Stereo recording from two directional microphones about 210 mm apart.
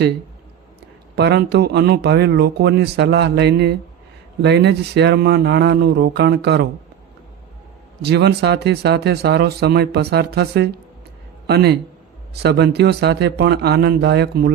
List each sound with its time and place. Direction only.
1.1 s speech: 50° right (ahead or behind)
8.0 s speech: 50° right (ahead or behind)